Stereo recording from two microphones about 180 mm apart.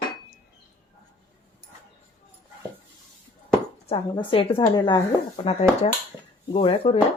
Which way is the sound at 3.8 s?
30° left (ahead or behind).